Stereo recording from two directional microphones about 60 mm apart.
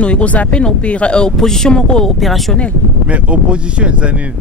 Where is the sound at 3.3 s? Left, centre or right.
Centre.